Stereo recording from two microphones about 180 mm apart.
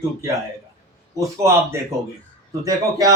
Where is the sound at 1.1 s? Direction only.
15° right (ahead or behind).